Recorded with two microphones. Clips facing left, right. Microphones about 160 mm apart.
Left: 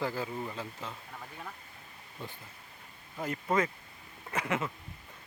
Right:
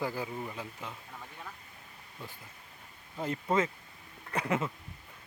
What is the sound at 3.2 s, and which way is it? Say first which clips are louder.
Speech: even; 25° right (ahead or behind).